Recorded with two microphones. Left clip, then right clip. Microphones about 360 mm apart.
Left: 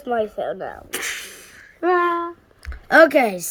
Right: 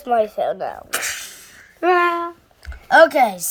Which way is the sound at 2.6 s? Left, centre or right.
Centre.